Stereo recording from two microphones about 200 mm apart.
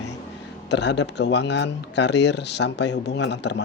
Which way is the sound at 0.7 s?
60° left (ahead or behind).